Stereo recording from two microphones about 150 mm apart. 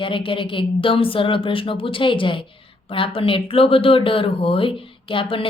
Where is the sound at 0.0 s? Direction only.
35° left (ahead or behind).